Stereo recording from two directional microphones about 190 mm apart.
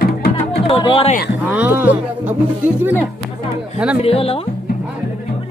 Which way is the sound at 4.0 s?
30° left (ahead or behind).